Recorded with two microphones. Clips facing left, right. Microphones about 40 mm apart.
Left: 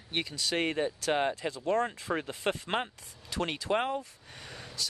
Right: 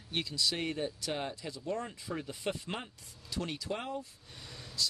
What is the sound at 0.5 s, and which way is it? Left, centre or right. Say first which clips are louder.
Speech: left 6 dB; left.